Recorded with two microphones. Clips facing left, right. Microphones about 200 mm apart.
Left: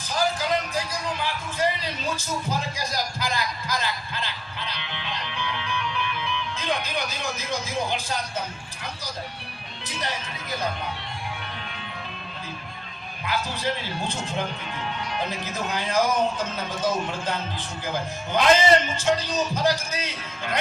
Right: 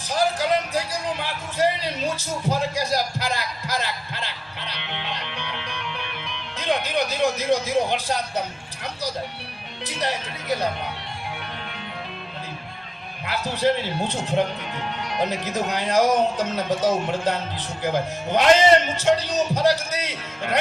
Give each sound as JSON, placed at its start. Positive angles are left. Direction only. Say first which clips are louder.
{"t": 0.1, "sound": "music", "louder": "right 3 dB", "side_deg": -65}
{"t": 2.1, "sound": "music", "louder": "right 3 dB", "side_deg": -70}
{"t": 6.6, "sound": "speech", "louder": "right 7 dB", "side_deg": -70}
{"t": 9.8, "sound": "speech", "louder": "right 5 dB", "side_deg": -70}
{"t": 13.2, "sound": "speech", "louder": "right 5 dB", "side_deg": -70}